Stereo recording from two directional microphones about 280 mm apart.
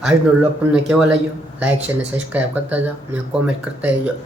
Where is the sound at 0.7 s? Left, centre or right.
Centre.